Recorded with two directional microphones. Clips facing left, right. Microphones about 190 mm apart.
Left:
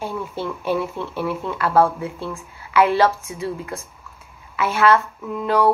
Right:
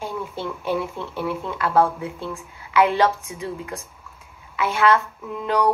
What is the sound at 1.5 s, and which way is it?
A woman's voice, 20° right (ahead or behind).